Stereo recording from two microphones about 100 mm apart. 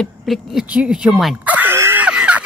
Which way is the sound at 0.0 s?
Centre (ahead or behind).